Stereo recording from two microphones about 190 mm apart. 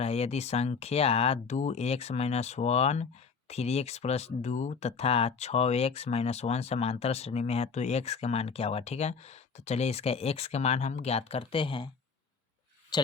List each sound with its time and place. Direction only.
0.0 s speech: 35° left (ahead or behind)
12.9 s speech: 20° left (ahead or behind)